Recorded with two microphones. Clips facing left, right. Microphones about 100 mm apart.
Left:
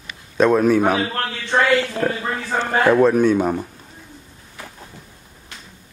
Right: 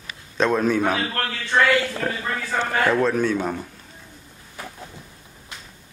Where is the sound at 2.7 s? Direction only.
20° left (ahead or behind).